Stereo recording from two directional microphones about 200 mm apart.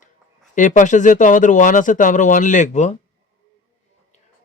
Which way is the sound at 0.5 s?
40° left (ahead or behind).